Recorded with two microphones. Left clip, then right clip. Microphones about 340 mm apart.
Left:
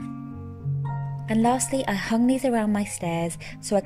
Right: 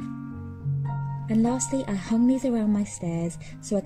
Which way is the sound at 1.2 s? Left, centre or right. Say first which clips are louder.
Left 3 dB; left.